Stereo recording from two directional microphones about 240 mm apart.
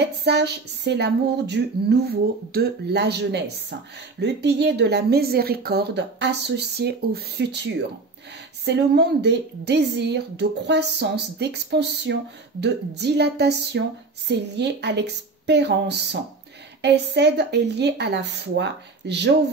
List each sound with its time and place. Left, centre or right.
0.0 s a woman's voice: right